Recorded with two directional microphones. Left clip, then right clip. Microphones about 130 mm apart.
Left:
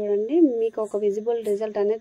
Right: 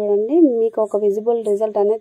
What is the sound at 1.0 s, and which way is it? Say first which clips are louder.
Speech: right 6 dB; 40° right (ahead or behind).